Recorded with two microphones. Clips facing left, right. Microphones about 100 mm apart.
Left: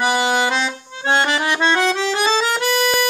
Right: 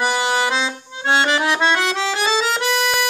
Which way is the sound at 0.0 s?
Centre (ahead or behind).